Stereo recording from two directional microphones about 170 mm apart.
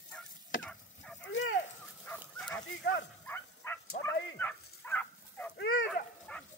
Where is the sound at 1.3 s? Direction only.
90° left.